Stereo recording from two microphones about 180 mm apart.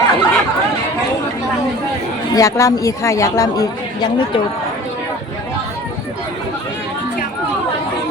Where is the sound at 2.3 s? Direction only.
20° left (ahead or behind).